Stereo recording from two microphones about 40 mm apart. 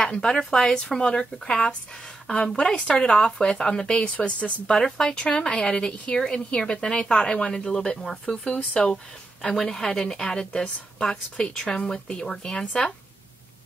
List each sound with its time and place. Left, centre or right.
0.1 s a woman's voice: centre
4.6 s a woman's voice: centre